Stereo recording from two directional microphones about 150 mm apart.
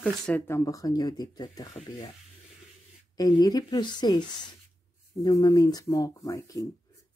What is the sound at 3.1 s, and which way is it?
Speech, 25° left (ahead or behind).